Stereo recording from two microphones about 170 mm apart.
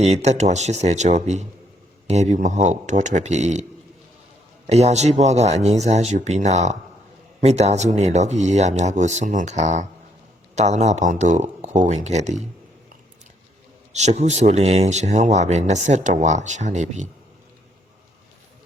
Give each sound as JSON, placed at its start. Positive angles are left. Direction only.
{"t": 0.0, "sound": "speech", "side_deg": -40}
{"t": 13.9, "sound": "speech", "side_deg": -40}